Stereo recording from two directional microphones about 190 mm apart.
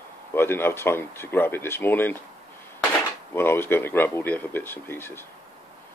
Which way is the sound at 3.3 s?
10° left (ahead or behind).